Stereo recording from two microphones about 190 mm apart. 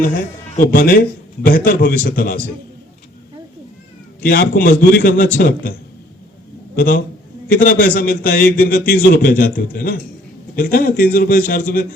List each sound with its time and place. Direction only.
0.6 s a man's voice: 50° left (ahead or behind)
4.2 s a man's voice: 50° left (ahead or behind)
6.7 s a man's voice: 45° left (ahead or behind)